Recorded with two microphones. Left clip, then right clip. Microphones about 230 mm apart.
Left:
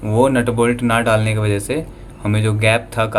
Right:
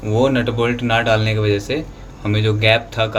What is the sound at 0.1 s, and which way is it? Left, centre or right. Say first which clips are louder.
Speech: left 2 dB; left.